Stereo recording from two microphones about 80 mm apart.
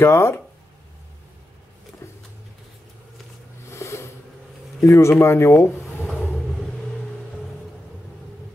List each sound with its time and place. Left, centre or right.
0.0 s speech: left
3.7 s a sound: left
4.8 s speech: left